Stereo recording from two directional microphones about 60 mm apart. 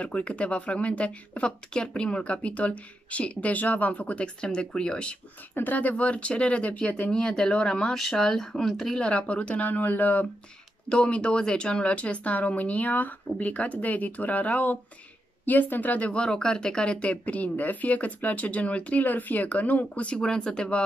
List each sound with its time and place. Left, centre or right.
0.0 s speech: left
5.5 s speech: left
7.1 s speech: centre; by 10.2 s left
10.9 s speech: centre
19.9 s speech: centre